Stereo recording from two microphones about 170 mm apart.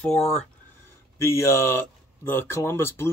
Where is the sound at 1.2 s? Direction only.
15° left (ahead or behind).